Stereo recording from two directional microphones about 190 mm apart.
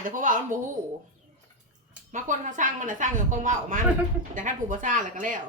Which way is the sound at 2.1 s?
40° right (ahead or behind).